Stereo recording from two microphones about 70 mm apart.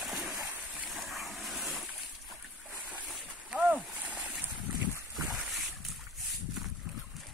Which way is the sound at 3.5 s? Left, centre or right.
Right.